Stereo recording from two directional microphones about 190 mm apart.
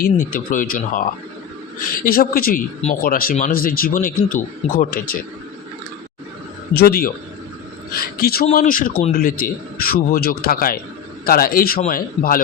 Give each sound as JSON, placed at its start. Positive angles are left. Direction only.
{"t": 0.0, "sound": "a man's voice", "side_deg": 45}
{"t": 6.7, "sound": "a man's voice", "side_deg": 50}